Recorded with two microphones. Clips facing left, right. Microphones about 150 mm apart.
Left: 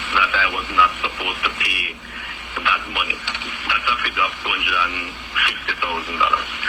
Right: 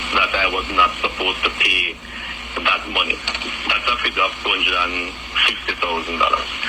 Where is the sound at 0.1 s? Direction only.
20° right (ahead or behind).